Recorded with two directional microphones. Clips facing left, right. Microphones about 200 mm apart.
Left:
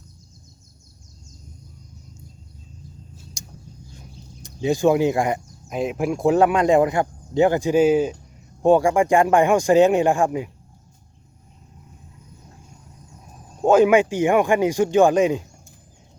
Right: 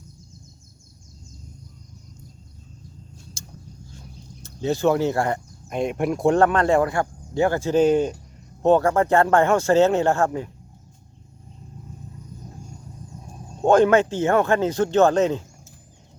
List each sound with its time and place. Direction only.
3.4 s vehicle: 15° left (ahead or behind)
3.9 s a sound: 15° left (ahead or behind)
5.6 s speech: centre (ahead or behind)
13.6 s speech: 10° left (ahead or behind)